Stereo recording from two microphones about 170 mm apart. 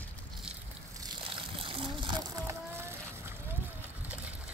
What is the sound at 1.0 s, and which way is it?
Splash, 30° right (ahead or behind).